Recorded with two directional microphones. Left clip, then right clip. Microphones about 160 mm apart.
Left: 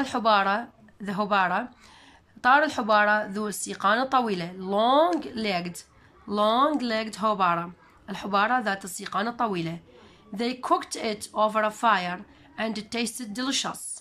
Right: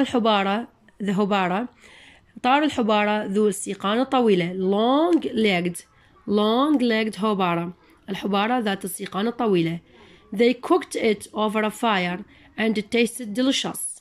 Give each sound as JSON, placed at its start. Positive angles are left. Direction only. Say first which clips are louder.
{"t": 0.0, "sound": "speech", "louder": "right 2 dB", "side_deg": -20}